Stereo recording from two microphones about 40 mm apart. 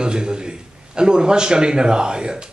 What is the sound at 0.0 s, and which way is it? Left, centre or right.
A man's voice, right.